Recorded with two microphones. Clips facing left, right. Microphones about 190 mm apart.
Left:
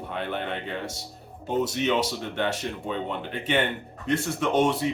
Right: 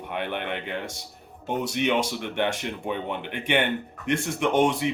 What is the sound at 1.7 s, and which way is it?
Speech, 15° right (ahead or behind).